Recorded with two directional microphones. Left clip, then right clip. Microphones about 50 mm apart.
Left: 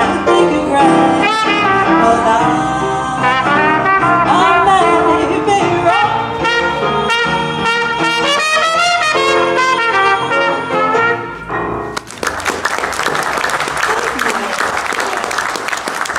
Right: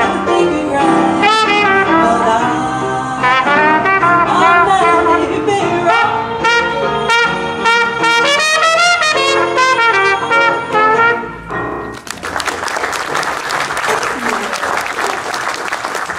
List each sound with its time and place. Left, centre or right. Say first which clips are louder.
0.0 s music: left 1 dB; centre
1.2 s brass instrument: right 2 dB; centre
1.9 s music: left 1 dB; centre
3.3 s music: right 2 dB; centre
5.9 s music: even; centre
7.1 s trumpet: right 1 dB; centre